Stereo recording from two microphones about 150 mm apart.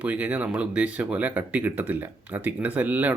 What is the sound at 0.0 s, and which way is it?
Speech, 10° right (ahead or behind).